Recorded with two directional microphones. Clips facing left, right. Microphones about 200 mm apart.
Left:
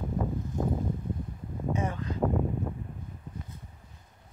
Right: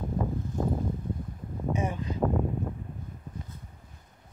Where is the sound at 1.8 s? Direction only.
15° right (ahead or behind).